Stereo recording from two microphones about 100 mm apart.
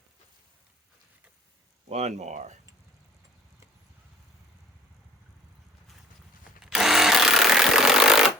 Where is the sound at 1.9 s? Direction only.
90° right.